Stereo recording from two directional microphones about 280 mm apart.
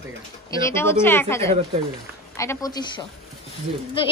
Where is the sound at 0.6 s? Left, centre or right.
Centre.